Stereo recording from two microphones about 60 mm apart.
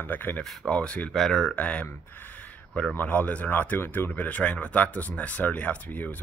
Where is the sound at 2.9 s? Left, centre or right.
Left.